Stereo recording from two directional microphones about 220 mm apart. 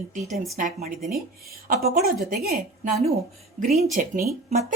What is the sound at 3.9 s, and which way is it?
Speech, 40° right (ahead or behind).